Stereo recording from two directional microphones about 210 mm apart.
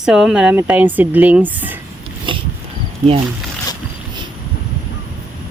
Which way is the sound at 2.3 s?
25° right (ahead or behind).